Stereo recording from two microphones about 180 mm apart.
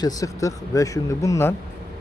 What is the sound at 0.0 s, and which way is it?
Speech, 20° left (ahead or behind).